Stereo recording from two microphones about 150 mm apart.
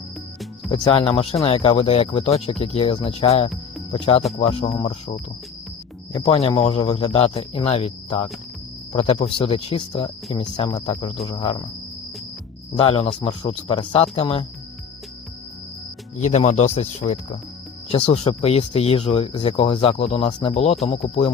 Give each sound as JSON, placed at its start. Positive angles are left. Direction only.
{"t": 0.7, "sound": "speech", "side_deg": 35}
{"t": 6.1, "sound": "speech", "side_deg": 35}
{"t": 12.7, "sound": "speech", "side_deg": 35}
{"t": 16.2, "sound": "speech", "side_deg": 50}